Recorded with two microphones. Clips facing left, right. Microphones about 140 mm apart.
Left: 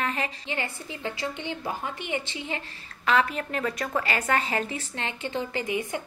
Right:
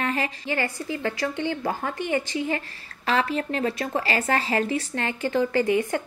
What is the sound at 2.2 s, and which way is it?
A woman's voice, 45° right (ahead or behind).